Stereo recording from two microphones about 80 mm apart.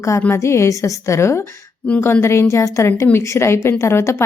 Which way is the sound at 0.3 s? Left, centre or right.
Left.